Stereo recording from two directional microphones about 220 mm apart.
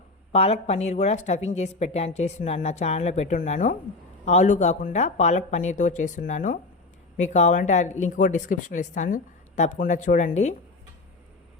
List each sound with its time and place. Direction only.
0.3 s a woman's voice: 30° left (ahead or behind)